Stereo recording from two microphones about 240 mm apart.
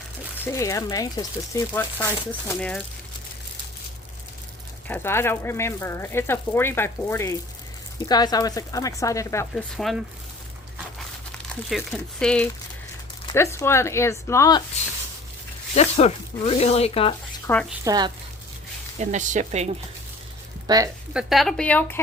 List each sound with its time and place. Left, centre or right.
0.4 s speech: centre
4.9 s speech: centre
9.7 s a woman's voice: centre
11.7 s a woman's voice: centre
15.7 s speech: left
17.4 s speech: centre
17.8 s speech: centre
18.9 s speech: right
20.7 s speech: centre
21.1 s a woman's voice: centre